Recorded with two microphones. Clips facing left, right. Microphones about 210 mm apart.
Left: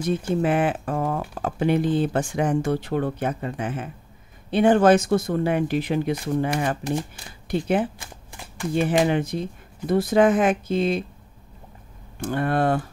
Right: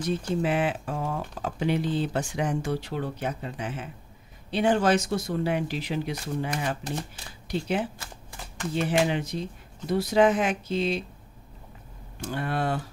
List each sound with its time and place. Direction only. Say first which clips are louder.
0.3 s speech: left 4 dB; 55° left (ahead or behind)
12.2 s speech: left 7 dB; 55° left (ahead or behind)